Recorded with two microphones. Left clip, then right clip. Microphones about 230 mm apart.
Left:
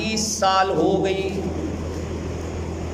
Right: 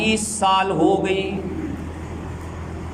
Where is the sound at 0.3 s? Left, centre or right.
Right.